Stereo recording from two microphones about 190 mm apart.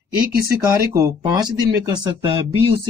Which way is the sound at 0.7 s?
20° right (ahead or behind).